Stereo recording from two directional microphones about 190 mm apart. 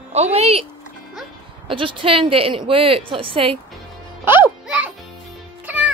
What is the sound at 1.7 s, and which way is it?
A woman's voice, 25° right (ahead or behind).